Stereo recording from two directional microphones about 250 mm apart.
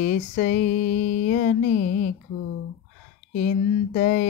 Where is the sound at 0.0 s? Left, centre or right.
Left.